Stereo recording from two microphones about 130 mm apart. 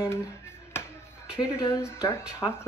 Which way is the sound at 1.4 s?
25° left (ahead or behind).